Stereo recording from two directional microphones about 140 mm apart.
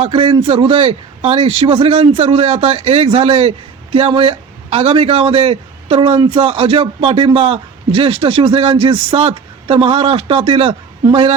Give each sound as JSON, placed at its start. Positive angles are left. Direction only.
{"t": 0.0, "sound": "a man's voice", "side_deg": -40}